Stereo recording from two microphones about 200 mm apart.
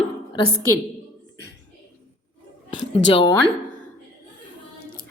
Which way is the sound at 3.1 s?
25° left (ahead or behind).